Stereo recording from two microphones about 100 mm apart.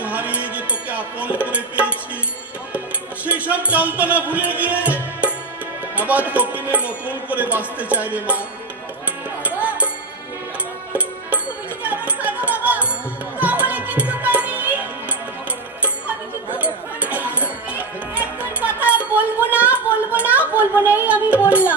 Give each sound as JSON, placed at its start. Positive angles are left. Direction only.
{"t": 0.0, "sound": "music", "side_deg": -15}
{"t": 3.2, "sound": "music", "side_deg": -15}
{"t": 9.4, "sound": "music", "side_deg": -15}
{"t": 11.8, "sound": "music", "side_deg": -15}
{"t": 17.0, "sound": "music", "side_deg": -15}
{"t": 18.9, "sound": "a sound", "side_deg": -15}
{"t": 20.8, "sound": "music", "side_deg": -15}